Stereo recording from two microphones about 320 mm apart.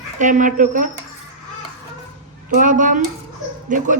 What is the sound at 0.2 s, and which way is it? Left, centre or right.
Speech, right.